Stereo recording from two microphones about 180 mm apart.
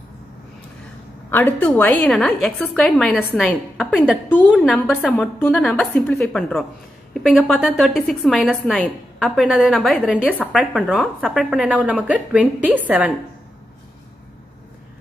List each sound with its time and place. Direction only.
1.3 s a woman's voice: 10° left (ahead or behind); by 13.1 s 10° right (ahead or behind)